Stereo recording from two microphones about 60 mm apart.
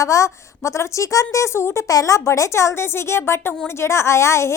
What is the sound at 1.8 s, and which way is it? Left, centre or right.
A woman's voice, left.